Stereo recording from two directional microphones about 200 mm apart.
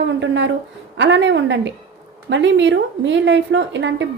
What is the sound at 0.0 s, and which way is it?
A woman's voice, 65° right (ahead or behind).